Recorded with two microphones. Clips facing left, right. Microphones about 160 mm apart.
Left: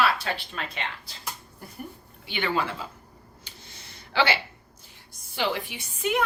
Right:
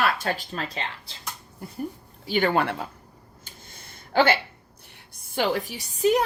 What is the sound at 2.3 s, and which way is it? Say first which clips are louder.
Speech: right 5 dB; 45° right (ahead or behind).